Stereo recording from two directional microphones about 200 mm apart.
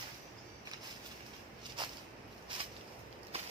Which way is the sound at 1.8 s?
25° right (ahead or behind).